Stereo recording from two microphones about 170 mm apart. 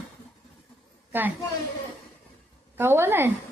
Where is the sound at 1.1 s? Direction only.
10° right (ahead or behind).